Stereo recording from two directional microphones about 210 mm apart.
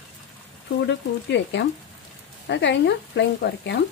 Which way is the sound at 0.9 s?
55° left (ahead or behind).